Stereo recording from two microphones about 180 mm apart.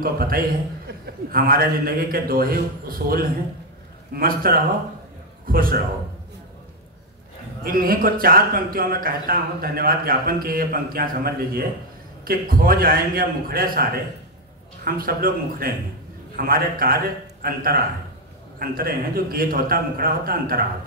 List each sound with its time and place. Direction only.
0.0 s a man's voice: 55° right (ahead or behind)
7.6 s a man's voice: 50° right (ahead or behind)
14.9 s a man's voice: 55° right (ahead or behind)